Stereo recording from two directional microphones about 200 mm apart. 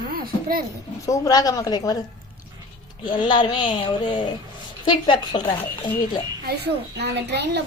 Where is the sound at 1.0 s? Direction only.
15° left (ahead or behind).